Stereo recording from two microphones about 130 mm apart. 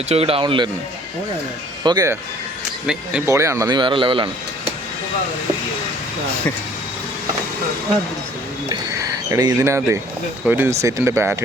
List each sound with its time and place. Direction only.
0.1 s a man's voice: 50° right (ahead or behind)
1.8 s a man's voice: 35° right (ahead or behind)
2.8 s speech: 5° right (ahead or behind)
3.2 s speech: 25° right (ahead or behind)
3.7 s a man's voice: 40° right (ahead or behind)
8.7 s speech: 25° right (ahead or behind)